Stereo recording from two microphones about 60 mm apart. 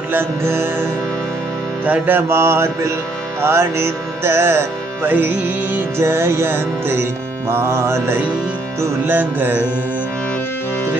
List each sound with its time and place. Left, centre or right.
0.1 s music: right
1.9 s music: right
2.2 s music: right
5.1 s music: right
9.0 s music: right